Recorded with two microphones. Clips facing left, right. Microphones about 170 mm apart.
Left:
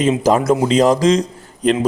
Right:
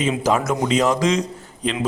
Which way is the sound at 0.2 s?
35° left (ahead or behind).